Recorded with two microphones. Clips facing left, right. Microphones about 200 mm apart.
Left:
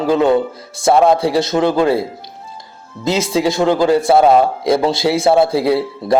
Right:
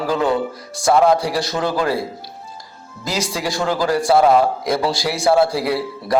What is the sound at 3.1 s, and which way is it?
A man's voice, 25° left (ahead or behind).